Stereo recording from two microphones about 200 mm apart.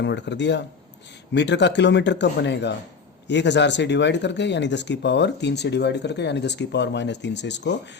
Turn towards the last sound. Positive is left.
turn(degrees=60)  # may be behind; listen again after turning